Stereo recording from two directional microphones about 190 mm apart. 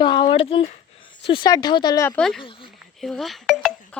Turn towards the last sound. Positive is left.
turn(degrees=0)  # may be behind; listen again after turning